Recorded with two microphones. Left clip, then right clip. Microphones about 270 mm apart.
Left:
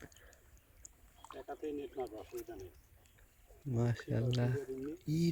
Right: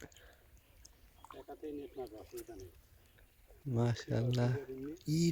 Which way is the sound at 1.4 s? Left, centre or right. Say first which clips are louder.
Left 4 dB; left.